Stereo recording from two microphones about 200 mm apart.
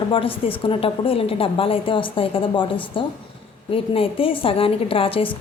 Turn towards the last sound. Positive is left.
turn(degrees=25)  # may be behind; listen again after turning